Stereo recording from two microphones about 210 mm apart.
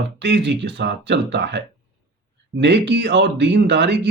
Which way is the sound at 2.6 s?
55° right (ahead or behind).